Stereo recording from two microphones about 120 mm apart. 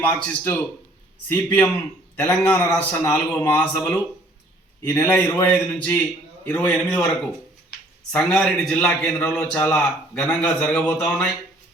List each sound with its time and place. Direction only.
0.0 s a man's voice: 15° left (ahead or behind)